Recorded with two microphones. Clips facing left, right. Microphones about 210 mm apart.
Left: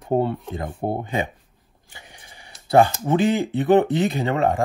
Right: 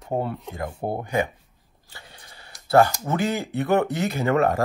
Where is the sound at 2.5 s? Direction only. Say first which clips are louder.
Left 1 dB; 20° left (ahead or behind).